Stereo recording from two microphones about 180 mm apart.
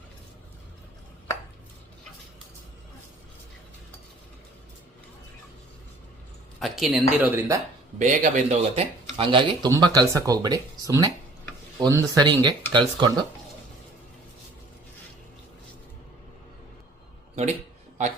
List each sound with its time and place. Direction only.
6.6 s speech: centre (ahead or behind)
7.9 s speech: 40° right (ahead or behind); by 13.1 s 25° right (ahead or behind)